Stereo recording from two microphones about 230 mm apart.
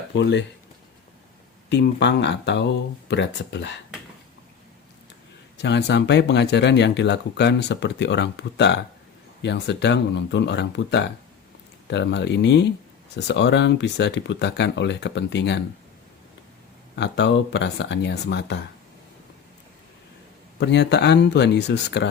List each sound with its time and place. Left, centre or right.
0.2 s speech: left
1.7 s speech: left
5.5 s speech: left
16.9 s speech: left
20.6 s speech: left